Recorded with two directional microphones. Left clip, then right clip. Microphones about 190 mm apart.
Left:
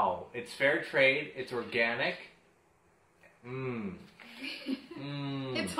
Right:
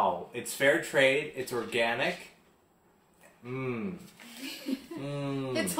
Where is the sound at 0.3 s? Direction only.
15° right (ahead or behind).